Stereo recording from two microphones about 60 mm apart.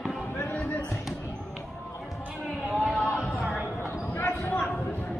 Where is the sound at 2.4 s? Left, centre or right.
Centre.